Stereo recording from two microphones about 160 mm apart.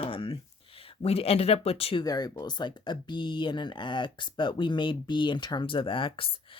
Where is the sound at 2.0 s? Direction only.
25° left (ahead or behind).